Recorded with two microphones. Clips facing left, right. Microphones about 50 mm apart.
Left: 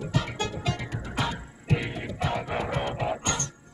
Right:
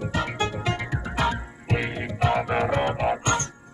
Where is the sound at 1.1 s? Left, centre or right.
Right.